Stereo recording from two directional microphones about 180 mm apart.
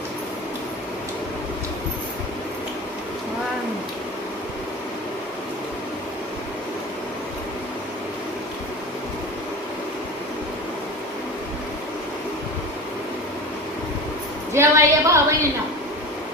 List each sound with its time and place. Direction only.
14.5 s a woman's voice: 15° right (ahead or behind)